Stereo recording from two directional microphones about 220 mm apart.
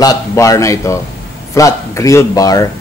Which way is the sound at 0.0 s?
15° left (ahead or behind).